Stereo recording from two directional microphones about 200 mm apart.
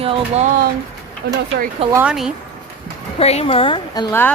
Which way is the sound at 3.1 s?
30° left (ahead or behind).